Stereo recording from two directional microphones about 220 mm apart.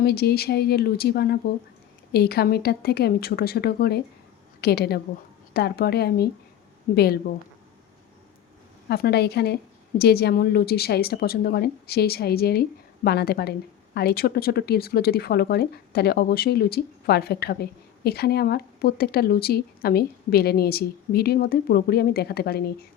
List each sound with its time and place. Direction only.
0.0 s a woman's voice: 45° left (ahead or behind)
8.9 s a woman's voice: 45° left (ahead or behind)